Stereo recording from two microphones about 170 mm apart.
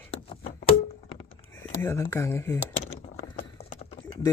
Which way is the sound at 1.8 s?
15° left (ahead or behind).